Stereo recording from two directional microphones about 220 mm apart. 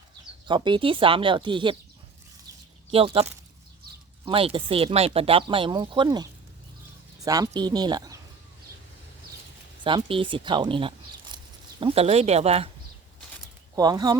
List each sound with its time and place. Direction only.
0.4 s speech: 20° right (ahead or behind)
2.9 s speech: 25° right (ahead or behind)
4.3 s speech: 25° right (ahead or behind)
7.3 s speech: 15° right (ahead or behind)
9.8 s speech: 20° right (ahead or behind)
13.7 s speech: 20° right (ahead or behind)